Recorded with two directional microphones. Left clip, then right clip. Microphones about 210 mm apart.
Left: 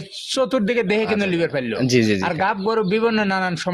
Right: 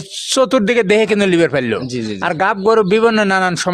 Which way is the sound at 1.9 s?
25° left (ahead or behind).